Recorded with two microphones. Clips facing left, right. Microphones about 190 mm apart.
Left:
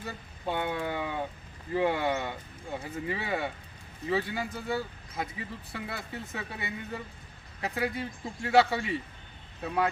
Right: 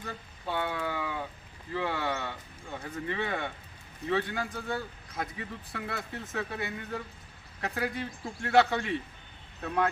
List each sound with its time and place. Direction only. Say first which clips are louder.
0.4 s speech: left 1 dB; 20° left (ahead or behind)